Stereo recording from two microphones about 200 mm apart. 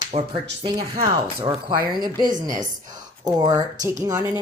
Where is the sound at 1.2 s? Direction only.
25° right (ahead or behind).